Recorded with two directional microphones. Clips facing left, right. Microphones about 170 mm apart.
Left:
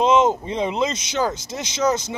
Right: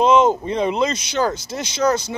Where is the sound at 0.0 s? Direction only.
20° left (ahead or behind).